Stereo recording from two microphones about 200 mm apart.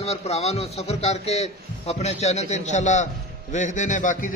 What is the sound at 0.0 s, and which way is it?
A man's voice, 30° left (ahead or behind).